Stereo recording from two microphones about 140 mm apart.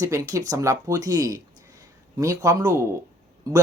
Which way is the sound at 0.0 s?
20° right (ahead or behind).